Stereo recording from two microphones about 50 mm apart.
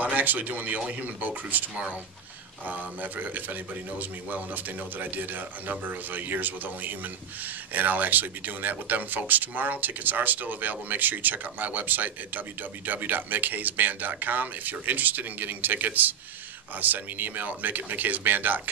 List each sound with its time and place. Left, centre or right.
0.0 s a man's voice: right